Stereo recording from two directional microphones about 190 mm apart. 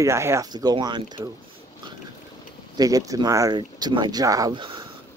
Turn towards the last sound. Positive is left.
turn(degrees=-25)  # may be behind; listen again after turning